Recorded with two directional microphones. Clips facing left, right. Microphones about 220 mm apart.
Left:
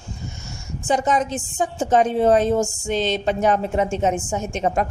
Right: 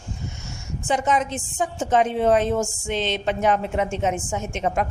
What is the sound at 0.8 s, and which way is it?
A woman's voice, 40° left (ahead or behind).